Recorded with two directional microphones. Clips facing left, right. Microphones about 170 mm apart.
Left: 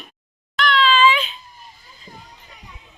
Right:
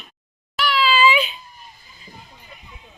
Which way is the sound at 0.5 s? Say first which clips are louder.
Left 2 dB; 5° right (ahead or behind).